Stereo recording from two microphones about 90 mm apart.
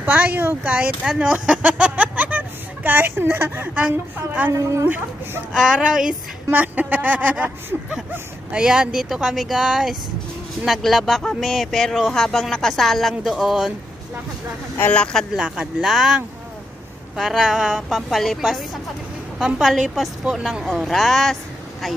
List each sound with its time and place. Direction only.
0.0 s speech: 20° right (ahead or behind)
1.0 s speech: 10° right (ahead or behind)
4.5 s a woman's voice: 35° right (ahead or behind)
4.8 s speech: 20° right (ahead or behind)
5.5 s speech: 5° right (ahead or behind)
6.5 s speech: 20° right (ahead or behind); by 13.7 s centre (ahead or behind)
14.8 s speech: 15° left (ahead or behind)
15.3 s speech: 10° right (ahead or behind)
17.2 s speech: 5° right (ahead or behind)